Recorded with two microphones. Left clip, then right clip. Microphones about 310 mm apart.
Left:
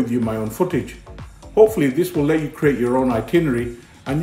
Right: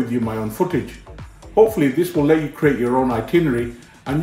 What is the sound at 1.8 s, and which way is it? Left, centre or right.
Speech, centre.